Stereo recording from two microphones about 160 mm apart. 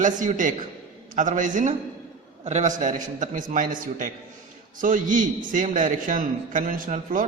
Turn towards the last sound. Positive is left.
turn(degrees=-55)  # may be behind; listen again after turning